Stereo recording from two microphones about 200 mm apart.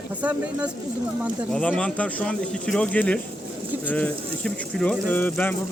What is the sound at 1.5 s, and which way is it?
Speech, 5° left (ahead or behind).